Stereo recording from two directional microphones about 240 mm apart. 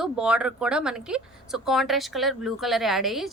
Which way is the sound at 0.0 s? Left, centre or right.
Centre.